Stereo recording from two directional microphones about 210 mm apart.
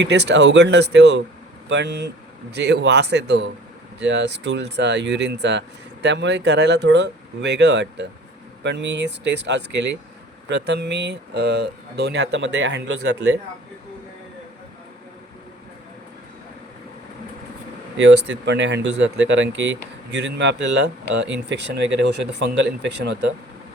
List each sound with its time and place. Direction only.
0.0 s speech: 55° right (ahead or behind)
17.9 s speech: 55° right (ahead or behind)